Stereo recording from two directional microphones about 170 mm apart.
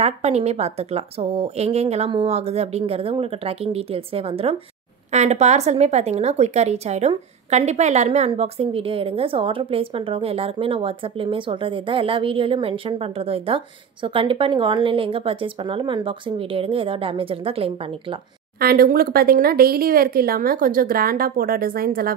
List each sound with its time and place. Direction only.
0.0 s a woman's voice: 40° right (ahead or behind)
18.6 s speech: 60° right (ahead or behind)